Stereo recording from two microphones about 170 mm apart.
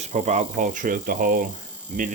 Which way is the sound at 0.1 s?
45° right (ahead or behind).